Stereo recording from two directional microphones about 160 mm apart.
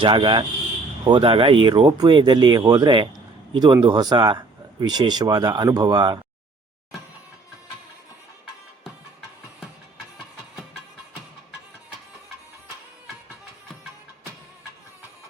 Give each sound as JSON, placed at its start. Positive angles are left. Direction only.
{"t": 0.0, "sound": "speech", "side_deg": -30}